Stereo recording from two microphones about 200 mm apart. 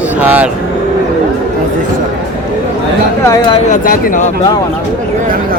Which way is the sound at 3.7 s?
45° left (ahead or behind).